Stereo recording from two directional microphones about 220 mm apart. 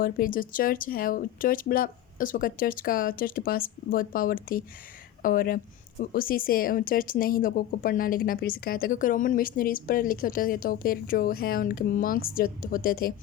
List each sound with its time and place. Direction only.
0.0 s a woman's voice: 40° left (ahead or behind)